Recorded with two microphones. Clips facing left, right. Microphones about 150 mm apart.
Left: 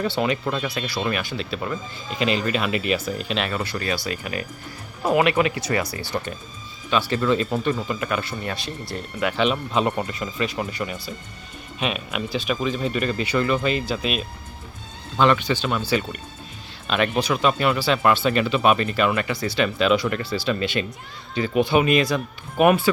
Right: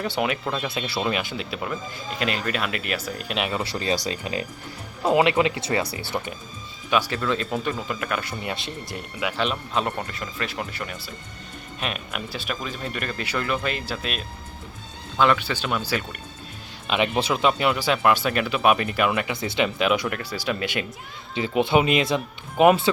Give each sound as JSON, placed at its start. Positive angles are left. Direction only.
{"t": 0.4, "sound": "speech", "side_deg": 0}
{"t": 0.9, "sound": "speech", "side_deg": -15}
{"t": 3.9, "sound": "speech", "side_deg": -30}
{"t": 7.1, "sound": "speech", "side_deg": 5}
{"t": 8.3, "sound": "speech", "side_deg": -20}
{"t": 9.2, "sound": "speech", "side_deg": 0}
{"t": 10.4, "sound": "speech", "side_deg": 0}
{"t": 15.2, "sound": "speech", "side_deg": 0}